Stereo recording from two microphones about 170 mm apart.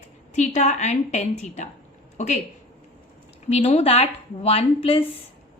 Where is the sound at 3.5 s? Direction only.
35° left (ahead or behind).